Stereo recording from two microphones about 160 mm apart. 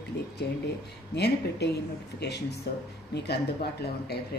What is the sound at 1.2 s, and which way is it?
A woman's voice, 90° left.